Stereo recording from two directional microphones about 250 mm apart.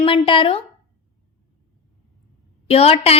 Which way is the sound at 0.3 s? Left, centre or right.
Left.